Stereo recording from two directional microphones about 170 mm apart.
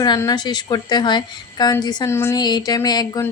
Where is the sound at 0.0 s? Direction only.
20° left (ahead or behind).